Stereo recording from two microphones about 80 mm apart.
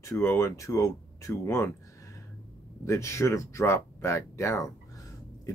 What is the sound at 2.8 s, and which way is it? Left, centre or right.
Speech, left.